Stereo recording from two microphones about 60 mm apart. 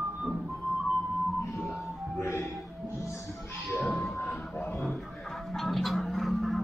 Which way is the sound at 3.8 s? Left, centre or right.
Centre.